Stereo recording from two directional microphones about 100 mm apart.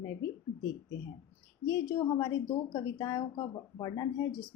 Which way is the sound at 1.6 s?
35° left (ahead or behind).